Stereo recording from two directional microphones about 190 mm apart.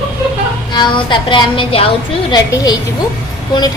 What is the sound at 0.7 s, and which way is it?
A woman's voice, 25° left (ahead or behind).